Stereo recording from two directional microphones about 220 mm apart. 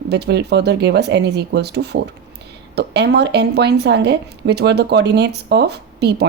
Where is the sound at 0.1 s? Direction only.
50° right (ahead or behind).